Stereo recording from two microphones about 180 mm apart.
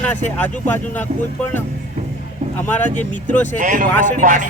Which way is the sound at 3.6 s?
45° right (ahead or behind).